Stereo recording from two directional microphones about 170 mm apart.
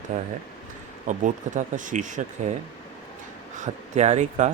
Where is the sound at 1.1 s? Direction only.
45° right (ahead or behind).